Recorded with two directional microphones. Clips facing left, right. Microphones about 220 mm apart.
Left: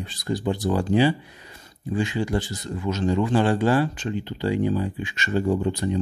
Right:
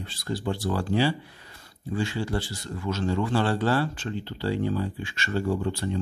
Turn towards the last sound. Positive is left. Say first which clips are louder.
# left 4 dB
turn(degrees=15)  # may be behind; listen again after turning